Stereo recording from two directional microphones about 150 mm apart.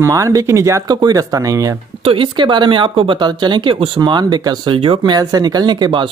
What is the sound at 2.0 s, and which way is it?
Speech, 35° right (ahead or behind).